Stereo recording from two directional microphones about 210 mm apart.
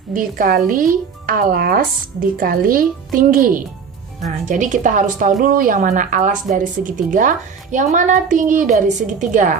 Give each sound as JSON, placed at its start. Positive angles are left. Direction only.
{"t": 0.1, "sound": "a woman's voice", "side_deg": -40}